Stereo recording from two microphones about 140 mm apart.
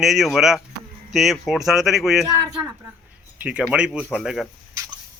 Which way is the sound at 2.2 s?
30° right (ahead or behind).